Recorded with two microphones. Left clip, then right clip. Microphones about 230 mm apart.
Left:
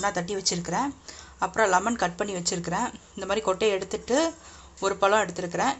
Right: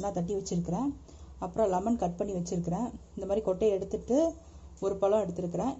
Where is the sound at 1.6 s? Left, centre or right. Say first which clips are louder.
Left 5 dB; left.